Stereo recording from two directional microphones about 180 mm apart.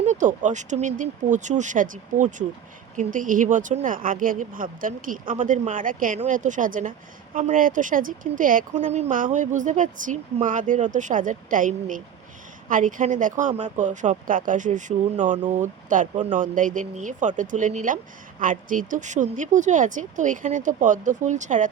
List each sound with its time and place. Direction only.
0.0 s speech: 45° right (ahead or behind)